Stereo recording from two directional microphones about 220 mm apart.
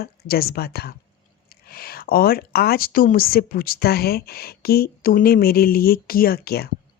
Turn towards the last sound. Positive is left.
turn(degrees=45)  # may be behind; listen again after turning